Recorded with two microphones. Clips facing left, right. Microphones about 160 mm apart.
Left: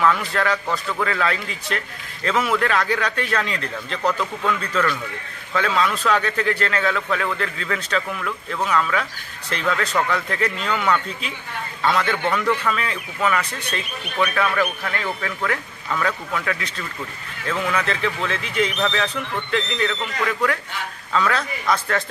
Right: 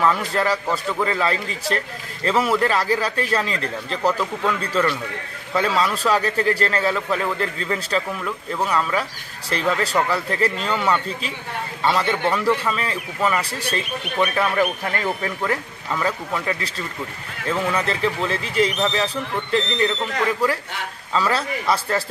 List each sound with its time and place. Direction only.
0.0 s a man's voice: 30° right (ahead or behind)
21.1 s a man's voice: 30° right (ahead or behind)